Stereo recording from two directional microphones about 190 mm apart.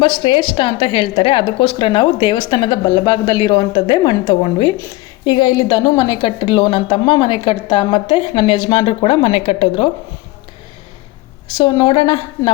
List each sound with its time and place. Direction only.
0.0 s a woman's voice: 25° left (ahead or behind)
11.5 s a woman's voice: 25° left (ahead or behind)